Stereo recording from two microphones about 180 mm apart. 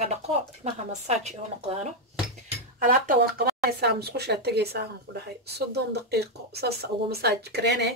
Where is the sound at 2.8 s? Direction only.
55° right (ahead or behind); by 7.9 s 70° right (ahead or behind).